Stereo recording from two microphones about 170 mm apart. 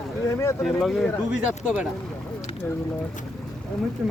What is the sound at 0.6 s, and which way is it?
Speech, centre (ahead or behind).